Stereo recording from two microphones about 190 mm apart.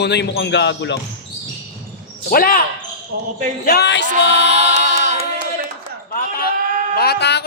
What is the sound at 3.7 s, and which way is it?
Speech, 60° left (ahead or behind).